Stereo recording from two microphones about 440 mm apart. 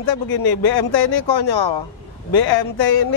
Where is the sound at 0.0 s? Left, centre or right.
Left.